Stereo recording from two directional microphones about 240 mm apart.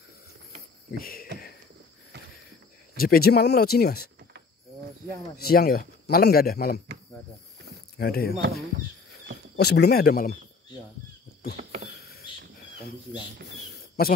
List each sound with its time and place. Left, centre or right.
1.0 s a sound: left
2.1 s a sound: right
3.0 s a man's voice: left
5.4 s a man's voice: left
8.0 s a man's voice: left
9.6 s a man's voice: left
14.0 s a man's voice: left